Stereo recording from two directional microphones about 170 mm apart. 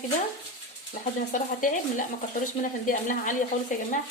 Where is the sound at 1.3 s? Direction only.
50° left (ahead or behind).